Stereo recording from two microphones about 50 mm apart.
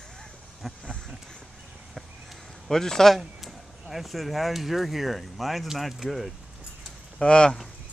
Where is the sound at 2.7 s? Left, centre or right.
Centre.